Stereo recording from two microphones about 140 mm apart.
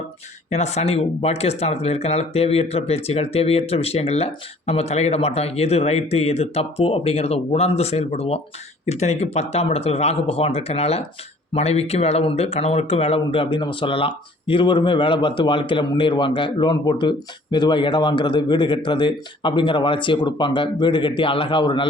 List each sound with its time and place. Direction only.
0.5 s speech: 50° left (ahead or behind); by 21.8 s 35° left (ahead or behind)